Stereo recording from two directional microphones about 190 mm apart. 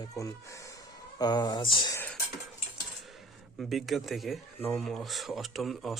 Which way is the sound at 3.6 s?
Centre (ahead or behind).